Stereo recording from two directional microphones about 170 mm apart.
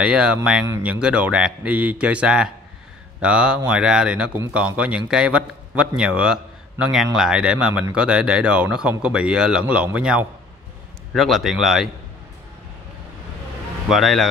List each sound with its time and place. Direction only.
0.0 s a man's voice: 5° right (ahead or behind)
0.7 s speech: 15° right (ahead or behind)
0.9 s a man's voice: 5° right (ahead or behind)
13.8 s a man's voice: centre (ahead or behind)